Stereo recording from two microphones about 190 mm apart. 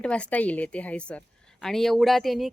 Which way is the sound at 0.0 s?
5° left (ahead or behind).